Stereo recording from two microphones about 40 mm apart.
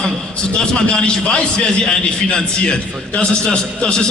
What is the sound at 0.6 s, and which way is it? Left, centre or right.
A man's voice, left.